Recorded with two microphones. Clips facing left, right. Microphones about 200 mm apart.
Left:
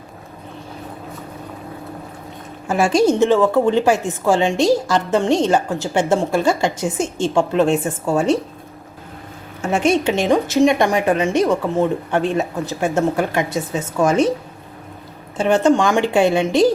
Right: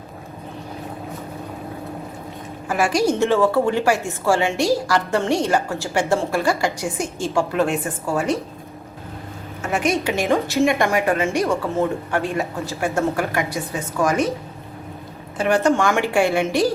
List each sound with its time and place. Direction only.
2.6 s a woman's voice: 25° left (ahead or behind)
9.6 s a woman's voice: 25° left (ahead or behind)
15.4 s a woman's voice: 25° left (ahead or behind)